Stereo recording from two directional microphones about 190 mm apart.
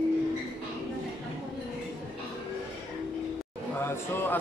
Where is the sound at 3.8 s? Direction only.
10° left (ahead or behind).